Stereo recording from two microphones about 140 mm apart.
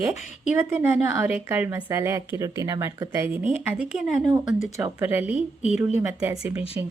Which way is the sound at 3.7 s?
5° right (ahead or behind).